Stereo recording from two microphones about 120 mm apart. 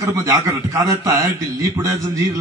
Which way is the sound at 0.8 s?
30° right (ahead or behind).